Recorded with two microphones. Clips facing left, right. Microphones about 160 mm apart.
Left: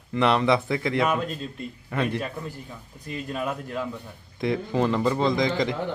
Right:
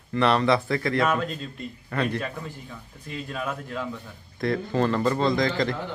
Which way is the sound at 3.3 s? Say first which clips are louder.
Left 2 dB; 15° left (ahead or behind).